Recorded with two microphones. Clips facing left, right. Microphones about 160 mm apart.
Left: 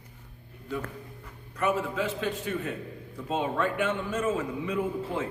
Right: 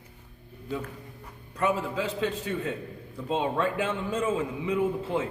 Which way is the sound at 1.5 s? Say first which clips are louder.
Even; 30° right (ahead or behind).